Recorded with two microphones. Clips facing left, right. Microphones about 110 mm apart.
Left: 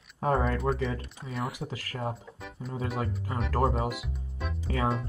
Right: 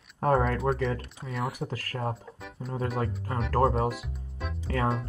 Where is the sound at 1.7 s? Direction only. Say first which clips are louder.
Right 2 dB; 45° right (ahead or behind).